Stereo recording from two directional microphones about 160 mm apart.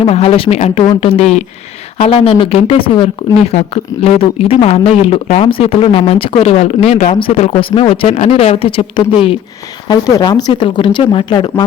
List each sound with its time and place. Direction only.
0.0 s speech: 35° left (ahead or behind)